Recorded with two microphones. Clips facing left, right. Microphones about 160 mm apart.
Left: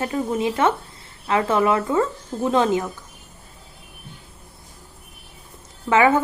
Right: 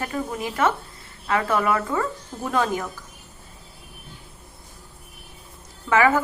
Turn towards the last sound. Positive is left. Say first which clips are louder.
# left 2 dB
turn(degrees=25)  # may be behind; listen again after turning